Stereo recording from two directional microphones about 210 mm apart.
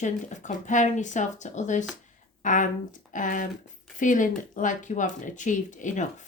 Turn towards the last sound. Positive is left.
turn(degrees=35)  # may be behind; listen again after turning